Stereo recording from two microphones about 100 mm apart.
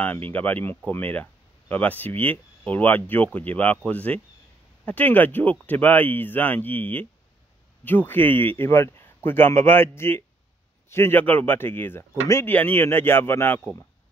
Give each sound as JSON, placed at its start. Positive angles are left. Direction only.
{"t": 0.0, "sound": "speech", "side_deg": 15}